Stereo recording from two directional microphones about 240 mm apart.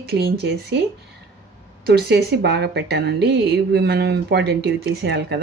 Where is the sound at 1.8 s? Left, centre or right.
Right.